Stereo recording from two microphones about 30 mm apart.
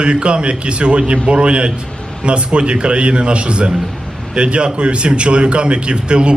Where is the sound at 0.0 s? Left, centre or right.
Right.